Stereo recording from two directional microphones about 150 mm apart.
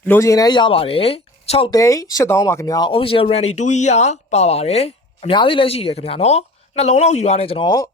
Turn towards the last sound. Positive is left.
turn(degrees=40)  # may be behind; listen again after turning